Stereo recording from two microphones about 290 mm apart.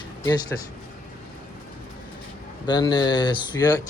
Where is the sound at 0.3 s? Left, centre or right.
Centre.